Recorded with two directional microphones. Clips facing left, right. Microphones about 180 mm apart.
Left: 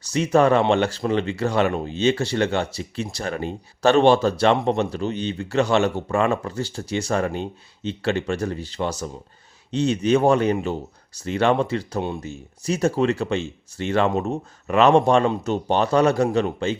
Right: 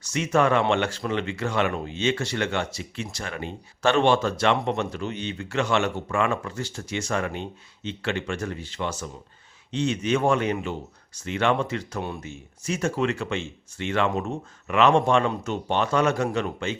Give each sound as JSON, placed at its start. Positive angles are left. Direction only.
{"t": 0.0, "sound": "speech", "side_deg": 35}